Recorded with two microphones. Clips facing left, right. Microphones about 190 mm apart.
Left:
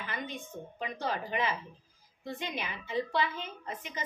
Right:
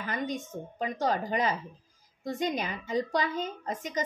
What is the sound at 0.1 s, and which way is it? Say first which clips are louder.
A woman's voice: right 9 dB; 45° right (ahead or behind).